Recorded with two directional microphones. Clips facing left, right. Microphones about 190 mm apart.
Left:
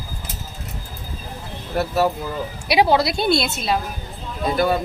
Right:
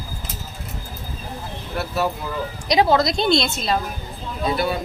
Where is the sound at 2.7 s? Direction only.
15° left (ahead or behind).